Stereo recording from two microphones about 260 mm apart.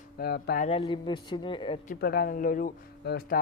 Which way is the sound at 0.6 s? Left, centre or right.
Centre.